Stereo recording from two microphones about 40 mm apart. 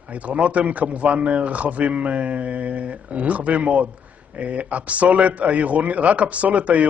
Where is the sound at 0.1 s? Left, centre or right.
Right.